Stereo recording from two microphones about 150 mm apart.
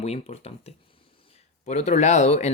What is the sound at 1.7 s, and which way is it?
Speech, 50° left (ahead or behind).